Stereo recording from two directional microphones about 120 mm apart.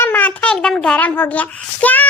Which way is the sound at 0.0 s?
15° left (ahead or behind).